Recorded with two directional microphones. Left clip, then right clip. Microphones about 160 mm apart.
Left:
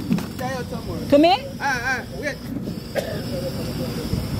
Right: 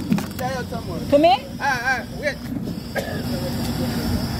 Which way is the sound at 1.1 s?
90° left.